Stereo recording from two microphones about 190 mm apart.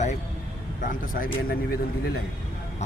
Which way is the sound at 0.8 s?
45° left (ahead or behind).